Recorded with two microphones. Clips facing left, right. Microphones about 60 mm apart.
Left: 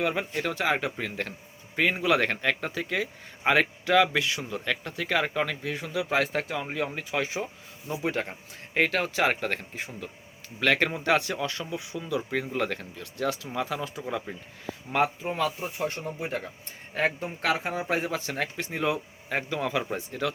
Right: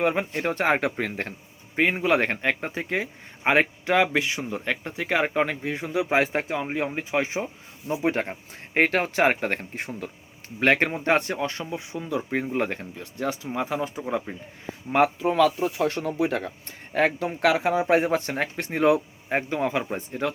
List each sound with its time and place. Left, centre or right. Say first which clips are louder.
0.0 s speech: right 4 dB; right
1.7 s speech: right 2 dB; right
9.7 s speech: right 4 dB; right
10.6 s speech: right 3 dB; right
15.2 s speech: right 8 dB; right
19.3 s speech: right 4 dB; right